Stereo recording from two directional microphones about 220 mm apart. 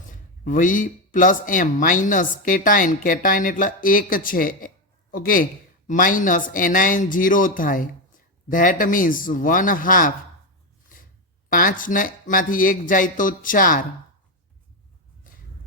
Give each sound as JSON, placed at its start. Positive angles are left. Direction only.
{"t": 0.1, "sound": "speech", "side_deg": 35}
{"t": 11.4, "sound": "speech", "side_deg": 40}